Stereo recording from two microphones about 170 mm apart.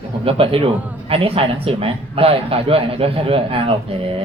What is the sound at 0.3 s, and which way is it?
Speech, 30° right (ahead or behind).